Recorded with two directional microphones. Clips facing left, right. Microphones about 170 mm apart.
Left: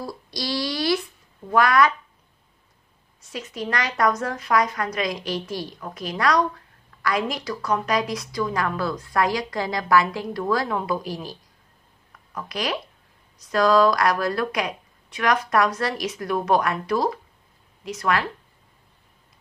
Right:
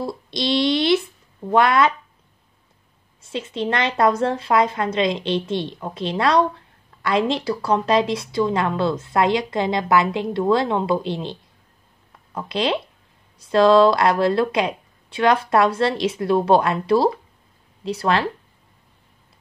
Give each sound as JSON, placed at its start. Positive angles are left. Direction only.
{"t": 0.0, "sound": "a sound", "side_deg": -25}
{"t": 1.5, "sound": "a woman's voice", "side_deg": -25}
{"t": 3.2, "sound": "a woman's voice", "side_deg": -25}
{"t": 12.4, "sound": "a woman's voice", "side_deg": -25}